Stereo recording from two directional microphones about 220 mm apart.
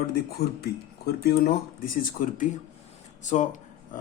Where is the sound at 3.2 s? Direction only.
35° left (ahead or behind).